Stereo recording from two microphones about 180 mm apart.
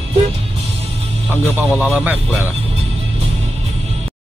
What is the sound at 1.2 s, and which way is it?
Music, 10° left (ahead or behind).